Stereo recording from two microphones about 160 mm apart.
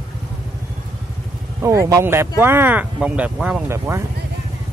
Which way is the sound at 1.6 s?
20° right (ahead or behind).